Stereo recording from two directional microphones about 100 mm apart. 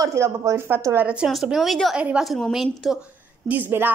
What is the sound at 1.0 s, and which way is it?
Speech, 10° right (ahead or behind).